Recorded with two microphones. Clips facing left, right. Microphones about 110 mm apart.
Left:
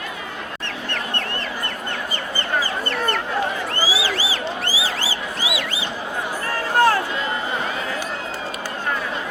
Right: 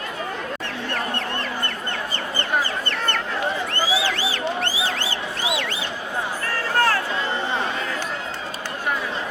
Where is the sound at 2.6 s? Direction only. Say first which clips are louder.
Left 2 dB; 5° left (ahead or behind).